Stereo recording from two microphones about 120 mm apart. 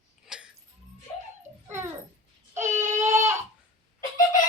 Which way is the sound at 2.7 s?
90° right.